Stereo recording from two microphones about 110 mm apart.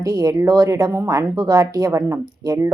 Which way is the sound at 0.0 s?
25° right (ahead or behind).